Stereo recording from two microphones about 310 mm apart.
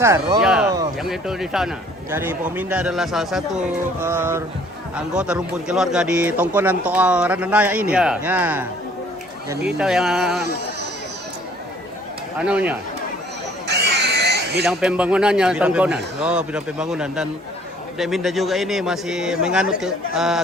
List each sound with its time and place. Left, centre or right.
0.0 s a sound: centre
1.0 s a man's voice: centre
9.6 s a man's voice: centre
12.5 s a man's voice: centre
13.7 s a sound: right
14.6 s a man's voice: centre